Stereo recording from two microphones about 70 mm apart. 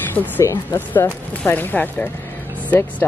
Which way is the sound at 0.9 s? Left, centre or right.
Left.